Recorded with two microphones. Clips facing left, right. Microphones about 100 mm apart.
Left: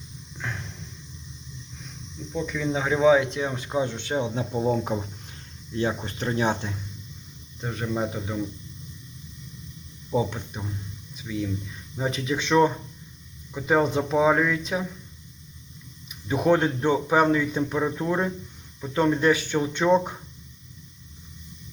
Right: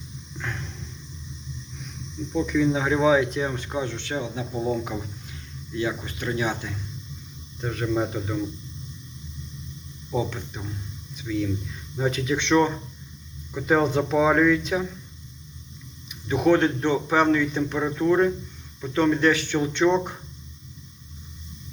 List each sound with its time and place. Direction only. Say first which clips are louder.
0.3 s a sound: right 1 dB; 5° left (ahead or behind)
2.3 s speech: right 5 dB; centre (ahead or behind); by 4.3 s 20° left (ahead or behind)
5.7 s speech: left 1 dB; 35° left (ahead or behind)
7.6 s speech: right 3 dB; 10° left (ahead or behind)
10.1 s speech: left 2 dB; 15° left (ahead or behind)
16.3 s speech: right 2 dB; 10° left (ahead or behind)